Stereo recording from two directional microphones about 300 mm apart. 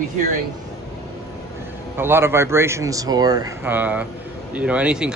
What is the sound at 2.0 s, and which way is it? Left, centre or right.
Speech, centre.